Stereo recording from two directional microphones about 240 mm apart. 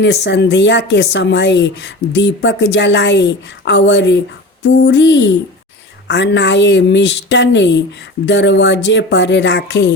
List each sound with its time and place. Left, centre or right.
0.0 s a woman's voice: left